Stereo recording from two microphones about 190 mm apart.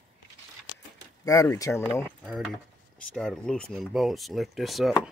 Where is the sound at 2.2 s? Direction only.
Centre (ahead or behind).